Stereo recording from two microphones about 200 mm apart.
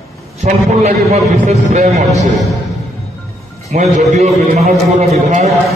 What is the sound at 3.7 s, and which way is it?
A man's voice, 35° right (ahead or behind).